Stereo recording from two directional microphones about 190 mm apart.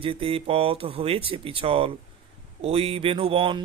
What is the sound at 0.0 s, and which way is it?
A man's voice, 30° right (ahead or behind).